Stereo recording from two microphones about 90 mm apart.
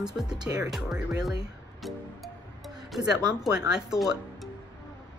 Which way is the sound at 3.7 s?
5° right (ahead or behind).